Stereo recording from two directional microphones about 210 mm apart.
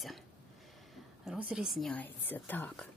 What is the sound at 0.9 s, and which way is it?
Speech, centre (ahead or behind).